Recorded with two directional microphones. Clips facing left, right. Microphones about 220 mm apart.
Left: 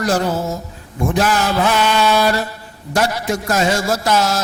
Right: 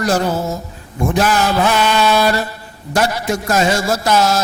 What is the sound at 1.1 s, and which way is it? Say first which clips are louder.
A man's voice: right 2 dB; 15° right (ahead or behind).